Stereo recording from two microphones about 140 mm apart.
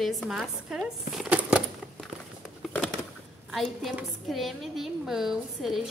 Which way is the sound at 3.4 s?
Centre (ahead or behind).